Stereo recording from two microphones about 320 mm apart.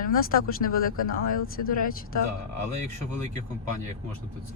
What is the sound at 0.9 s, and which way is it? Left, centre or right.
Speech, left.